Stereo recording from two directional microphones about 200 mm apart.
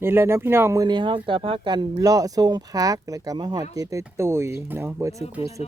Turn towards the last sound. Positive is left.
turn(degrees=-10)  # may be behind; listen again after turning